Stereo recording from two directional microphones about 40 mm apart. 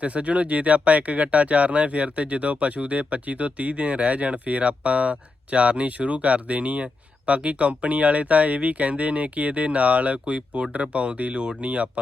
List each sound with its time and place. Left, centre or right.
0.0 s speech: right